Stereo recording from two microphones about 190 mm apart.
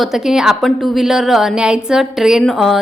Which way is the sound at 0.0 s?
Centre (ahead or behind).